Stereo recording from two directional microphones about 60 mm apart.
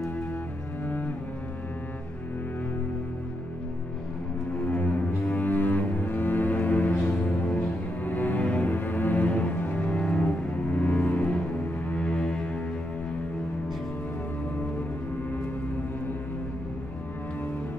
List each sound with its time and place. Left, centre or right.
0.8 s cello: left
4.6 s cello: left
11.9 s music: left